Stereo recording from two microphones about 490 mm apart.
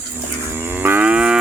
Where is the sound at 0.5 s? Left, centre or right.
Centre.